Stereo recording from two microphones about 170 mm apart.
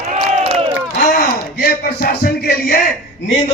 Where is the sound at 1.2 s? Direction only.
60° left (ahead or behind).